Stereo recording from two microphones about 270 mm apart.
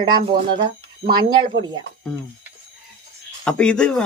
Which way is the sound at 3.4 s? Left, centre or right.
Centre.